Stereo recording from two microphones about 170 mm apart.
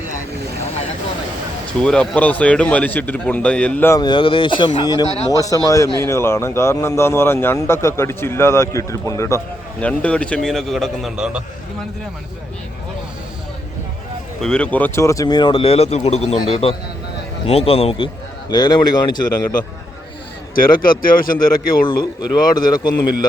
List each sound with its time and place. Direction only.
1.8 s speech: 5° left (ahead or behind)
4.0 s a man's voice: 30° left (ahead or behind); by 11.4 s 5° right (ahead or behind)
14.4 s a man's voice: 5° left (ahead or behind); by 19.5 s 25° left (ahead or behind)
20.6 s speech: 55° left (ahead or behind)
21.8 s a man's voice: 25° left (ahead or behind)